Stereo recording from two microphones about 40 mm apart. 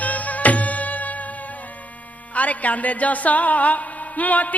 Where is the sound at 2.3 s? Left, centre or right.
Left.